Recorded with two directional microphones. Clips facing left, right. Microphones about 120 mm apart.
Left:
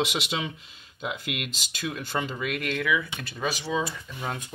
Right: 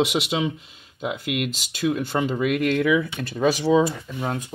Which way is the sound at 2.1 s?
35° right (ahead or behind).